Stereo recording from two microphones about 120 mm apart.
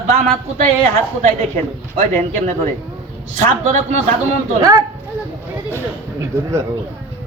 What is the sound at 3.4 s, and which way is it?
Speech, 65° right (ahead or behind).